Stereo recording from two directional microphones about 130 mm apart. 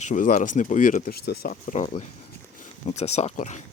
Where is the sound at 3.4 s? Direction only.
70° left (ahead or behind).